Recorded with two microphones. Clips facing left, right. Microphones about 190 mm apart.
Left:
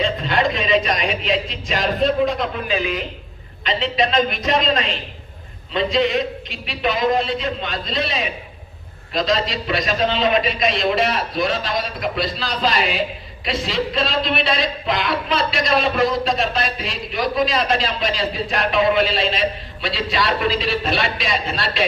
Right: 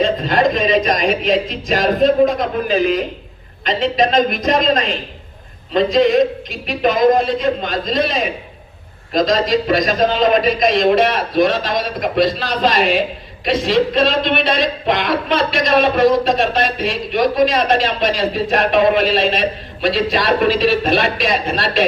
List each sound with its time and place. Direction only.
0.0 s speech: 45° right (ahead or behind)